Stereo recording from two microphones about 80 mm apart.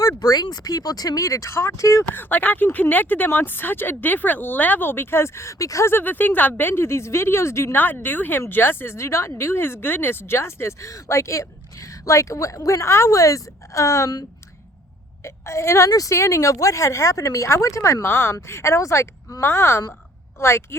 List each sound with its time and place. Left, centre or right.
0.2 s speech: left
2.1 s speech: left
5.9 s speech: left
15.2 s a woman's voice: left
18.0 s speech: left